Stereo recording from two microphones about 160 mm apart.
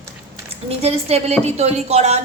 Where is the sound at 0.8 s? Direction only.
40° right (ahead or behind).